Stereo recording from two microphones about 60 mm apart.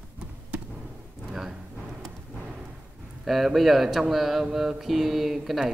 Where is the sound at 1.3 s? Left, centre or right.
Centre.